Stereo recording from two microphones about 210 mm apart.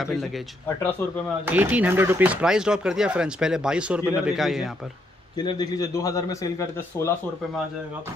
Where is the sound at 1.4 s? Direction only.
10° right (ahead or behind).